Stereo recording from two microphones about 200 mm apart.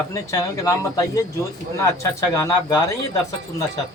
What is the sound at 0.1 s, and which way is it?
Speech, 15° left (ahead or behind).